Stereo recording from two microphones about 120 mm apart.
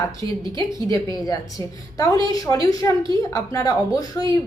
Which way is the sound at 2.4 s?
30° left (ahead or behind).